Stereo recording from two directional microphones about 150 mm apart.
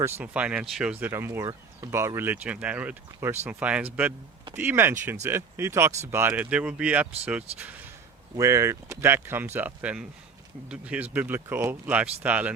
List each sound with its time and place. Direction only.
0.0 s speech: 10° right (ahead or behind)
8.4 s speech: 20° right (ahead or behind)